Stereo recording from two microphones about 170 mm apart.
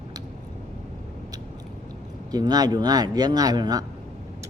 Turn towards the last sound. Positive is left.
turn(degrees=-25)  # may be behind; listen again after turning